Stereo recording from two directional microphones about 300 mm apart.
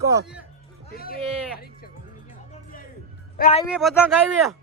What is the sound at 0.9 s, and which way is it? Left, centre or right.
Speech, left.